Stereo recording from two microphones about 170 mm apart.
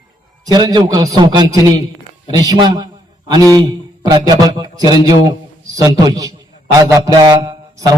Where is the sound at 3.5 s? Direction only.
25° right (ahead or behind).